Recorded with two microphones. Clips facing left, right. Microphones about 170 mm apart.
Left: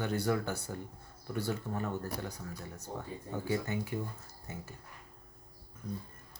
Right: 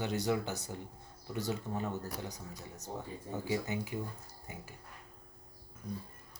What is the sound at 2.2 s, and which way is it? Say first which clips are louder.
Speech: left 2 dB; 15° right (ahead or behind).